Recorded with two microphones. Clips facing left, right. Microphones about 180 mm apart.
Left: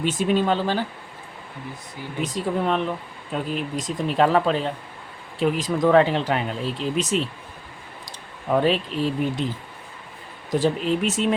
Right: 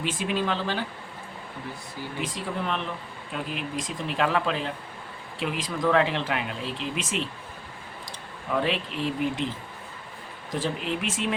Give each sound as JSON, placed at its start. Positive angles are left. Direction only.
{"t": 0.0, "sound": "speech", "side_deg": 40}
{"t": 2.2, "sound": "speech", "side_deg": 40}
{"t": 8.4, "sound": "speech", "side_deg": 40}
{"t": 10.5, "sound": "speech", "side_deg": 40}